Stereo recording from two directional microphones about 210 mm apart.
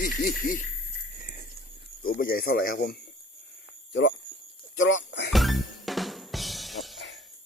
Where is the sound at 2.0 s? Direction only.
45° left (ahead or behind).